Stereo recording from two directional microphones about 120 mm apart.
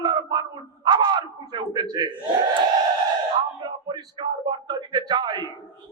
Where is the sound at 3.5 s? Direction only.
40° right (ahead or behind).